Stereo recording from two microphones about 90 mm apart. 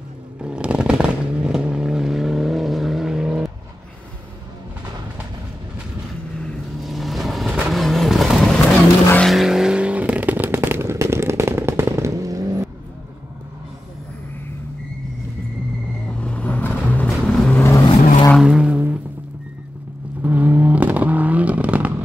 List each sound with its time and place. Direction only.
0.4 s vehicle: 10° right (ahead or behind)
6.4 s vehicle: centre (ahead or behind); by 12.6 s 40° right (ahead or behind)
16.1 s vehicle: 10° left (ahead or behind)
16.8 s music: 15° left (ahead or behind)
17.1 s vehicle: 5° left (ahead or behind)
17.6 s vehicle: 35° left (ahead or behind)
18.4 s vehicle: 10° right (ahead or behind)
20.2 s vehicle: 20° right (ahead or behind)